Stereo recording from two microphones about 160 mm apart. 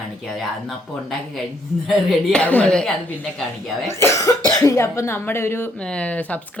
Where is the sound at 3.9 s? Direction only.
15° left (ahead or behind).